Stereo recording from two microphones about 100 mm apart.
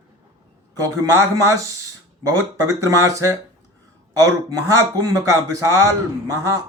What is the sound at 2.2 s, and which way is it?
Speech, 35° right (ahead or behind).